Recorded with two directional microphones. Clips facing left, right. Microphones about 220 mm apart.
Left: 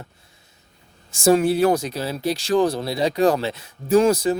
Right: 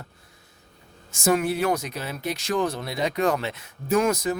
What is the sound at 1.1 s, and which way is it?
Speech, 30° left (ahead or behind).